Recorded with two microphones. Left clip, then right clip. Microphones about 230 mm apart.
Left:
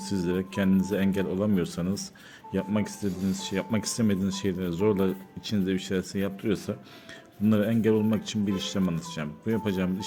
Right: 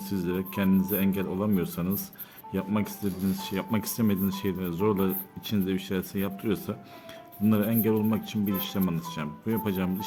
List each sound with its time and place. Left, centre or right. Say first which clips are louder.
0.0 s speech: left 2 dB; centre